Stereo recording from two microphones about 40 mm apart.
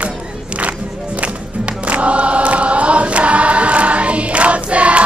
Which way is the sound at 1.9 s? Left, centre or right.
Right.